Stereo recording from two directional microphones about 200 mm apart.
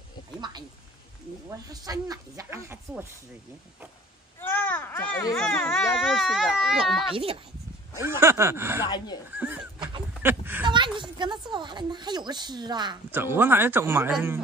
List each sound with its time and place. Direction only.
0.4 s a sound: 20° right (ahead or behind)
1.5 s speech: 20° right (ahead or behind)
4.4 s a sound: 10° left (ahead or behind)
5.3 s a child's voice: 5° left (ahead or behind)
5.9 s speech: centre (ahead or behind)
7.1 s speech: 30° right (ahead or behind)
8.0 s speech: 15° right (ahead or behind)
8.8 s speech: 20° left (ahead or behind)
9.3 s a sound: 10° right (ahead or behind)
10.2 s speech: 10° right (ahead or behind)
10.6 s speech: 25° right (ahead or behind)